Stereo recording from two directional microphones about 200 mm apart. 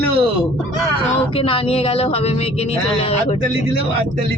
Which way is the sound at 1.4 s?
30° left (ahead or behind).